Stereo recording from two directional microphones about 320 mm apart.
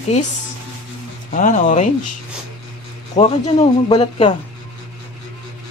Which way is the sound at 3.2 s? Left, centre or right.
Left.